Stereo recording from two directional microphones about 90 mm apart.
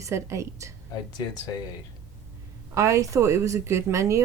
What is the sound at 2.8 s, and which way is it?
A woman's voice, 35° right (ahead or behind).